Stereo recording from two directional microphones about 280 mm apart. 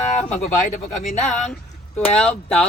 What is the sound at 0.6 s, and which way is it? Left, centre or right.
Speech, left.